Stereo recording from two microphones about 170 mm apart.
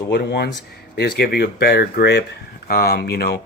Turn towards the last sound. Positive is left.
turn(degrees=70)  # may be behind; listen again after turning